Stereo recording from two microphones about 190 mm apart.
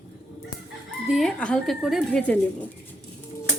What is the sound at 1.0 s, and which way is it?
Speech, centre (ahead or behind).